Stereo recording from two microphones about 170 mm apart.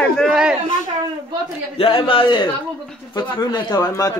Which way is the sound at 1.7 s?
30° left (ahead or behind).